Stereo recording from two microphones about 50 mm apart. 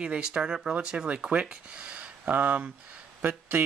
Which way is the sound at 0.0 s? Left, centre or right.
Centre.